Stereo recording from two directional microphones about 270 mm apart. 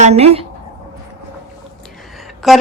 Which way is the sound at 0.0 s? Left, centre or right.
Right.